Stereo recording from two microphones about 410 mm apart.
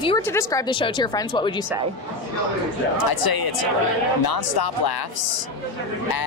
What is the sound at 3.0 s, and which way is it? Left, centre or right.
Speech, left.